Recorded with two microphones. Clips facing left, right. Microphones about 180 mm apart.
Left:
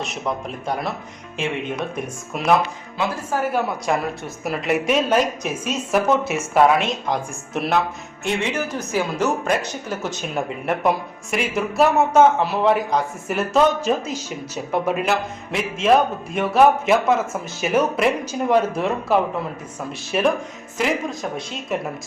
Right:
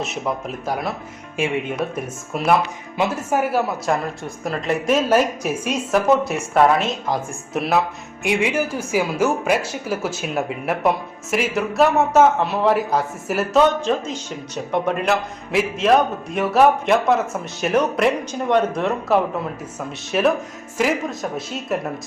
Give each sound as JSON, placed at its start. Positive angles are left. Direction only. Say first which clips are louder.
{"t": 0.0, "sound": "speech", "louder": "right 1 dB", "side_deg": 0}
{"t": 3.0, "sound": "a woman's voice", "louder": "right 3 dB", "side_deg": -25}
{"t": 3.5, "sound": "speech", "louder": "right 1 dB", "side_deg": 0}
{"t": 5.9, "sound": "speech", "louder": "right 1 dB", "side_deg": 0}
{"t": 8.2, "sound": "speech", "louder": "right 3 dB", "side_deg": -10}